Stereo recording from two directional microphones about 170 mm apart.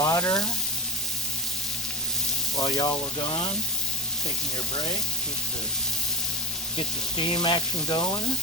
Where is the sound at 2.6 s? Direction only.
25° left (ahead or behind).